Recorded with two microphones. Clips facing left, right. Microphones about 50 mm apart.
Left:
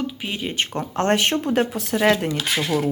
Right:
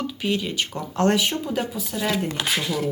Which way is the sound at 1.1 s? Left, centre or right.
Left.